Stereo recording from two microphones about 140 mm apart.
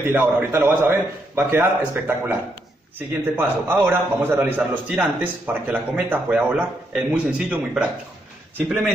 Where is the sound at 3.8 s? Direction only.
15° right (ahead or behind).